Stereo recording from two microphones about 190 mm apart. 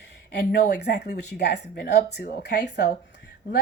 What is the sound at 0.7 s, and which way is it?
A woman's voice, 60° left (ahead or behind).